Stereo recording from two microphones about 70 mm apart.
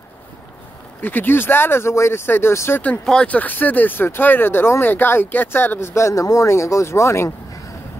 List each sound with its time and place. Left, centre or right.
1.0 s speech: left
3.3 s speech: left